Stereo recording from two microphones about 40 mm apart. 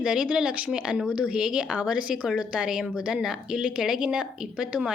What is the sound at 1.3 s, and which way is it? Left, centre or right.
Speech, right.